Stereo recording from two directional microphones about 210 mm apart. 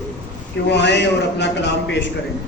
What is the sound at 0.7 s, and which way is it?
A man's voice, 55° left (ahead or behind).